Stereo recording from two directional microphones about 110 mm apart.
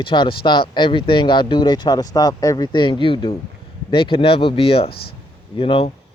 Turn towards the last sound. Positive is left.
turn(degrees=55)  # may be behind; listen again after turning